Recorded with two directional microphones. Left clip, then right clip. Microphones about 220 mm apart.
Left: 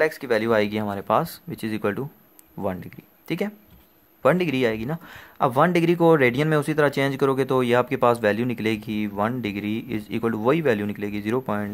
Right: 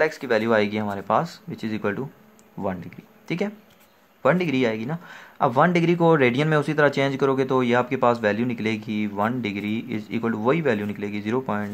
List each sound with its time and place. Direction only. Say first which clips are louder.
0.0 s speech: even; 20° left (ahead or behind)